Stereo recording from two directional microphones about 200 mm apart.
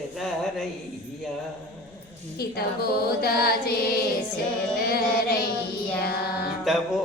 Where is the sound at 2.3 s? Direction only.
50° left (ahead or behind).